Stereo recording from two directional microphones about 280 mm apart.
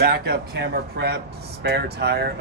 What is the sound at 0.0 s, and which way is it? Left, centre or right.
Speech, right.